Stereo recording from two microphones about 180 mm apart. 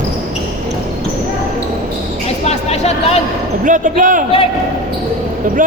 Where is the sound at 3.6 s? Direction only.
45° right (ahead or behind).